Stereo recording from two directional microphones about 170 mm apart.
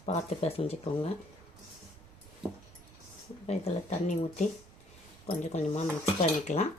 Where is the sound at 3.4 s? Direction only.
40° left (ahead or behind).